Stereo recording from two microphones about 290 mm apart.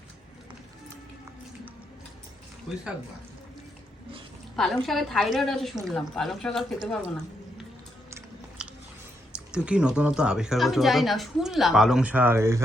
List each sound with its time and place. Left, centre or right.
4.5 s speech: centre
8.6 s chewing: centre
9.3 s speech: centre